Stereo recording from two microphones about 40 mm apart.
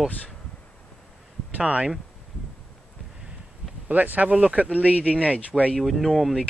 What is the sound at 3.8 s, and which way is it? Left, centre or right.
Speech, right.